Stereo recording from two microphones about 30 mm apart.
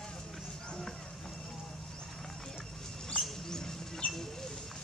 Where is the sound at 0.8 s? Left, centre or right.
Centre.